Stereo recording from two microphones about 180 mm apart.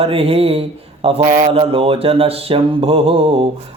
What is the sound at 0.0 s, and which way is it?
Speech, 30° right (ahead or behind).